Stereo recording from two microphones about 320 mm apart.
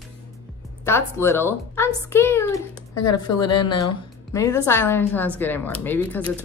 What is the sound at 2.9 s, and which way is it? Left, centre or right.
Speech, left.